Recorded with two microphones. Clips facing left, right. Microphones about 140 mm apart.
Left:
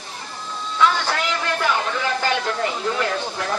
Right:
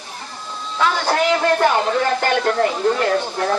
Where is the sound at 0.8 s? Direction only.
45° right (ahead or behind).